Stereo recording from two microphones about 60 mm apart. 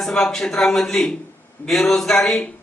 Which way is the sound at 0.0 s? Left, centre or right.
Centre.